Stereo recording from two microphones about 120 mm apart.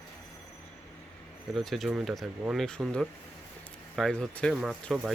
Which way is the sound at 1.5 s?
Centre (ahead or behind).